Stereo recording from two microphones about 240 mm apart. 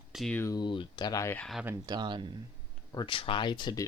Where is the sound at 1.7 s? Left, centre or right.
Centre.